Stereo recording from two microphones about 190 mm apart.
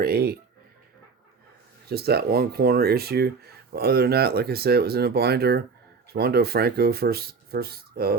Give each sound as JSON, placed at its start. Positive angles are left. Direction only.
{"t": 0.0, "sound": "speech", "side_deg": -55}
{"t": 1.9, "sound": "speech", "side_deg": -55}